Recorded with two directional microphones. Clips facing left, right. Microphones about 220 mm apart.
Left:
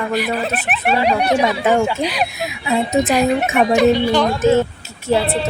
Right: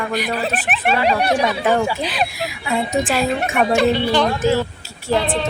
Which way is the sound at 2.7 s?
25° left (ahead or behind).